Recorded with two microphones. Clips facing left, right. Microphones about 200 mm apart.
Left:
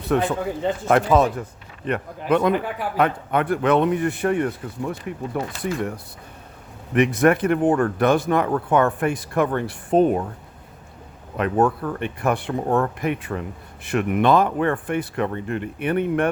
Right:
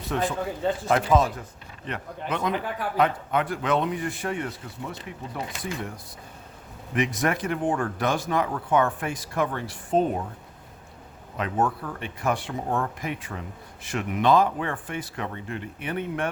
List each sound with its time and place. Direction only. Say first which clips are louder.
0.1 s speech: left 6 dB; 65° left (ahead or behind)
1.9 s speech: left 10 dB; 55° left (ahead or behind)
6.9 s speech: left 8 dB; 60° left (ahead or behind)
11.3 s speech: left 6 dB; 60° left (ahead or behind)